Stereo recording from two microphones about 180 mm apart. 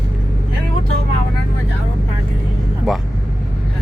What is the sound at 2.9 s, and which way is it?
Speech, centre (ahead or behind).